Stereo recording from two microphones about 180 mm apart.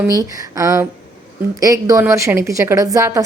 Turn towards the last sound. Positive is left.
turn(degrees=-20)  # may be behind; listen again after turning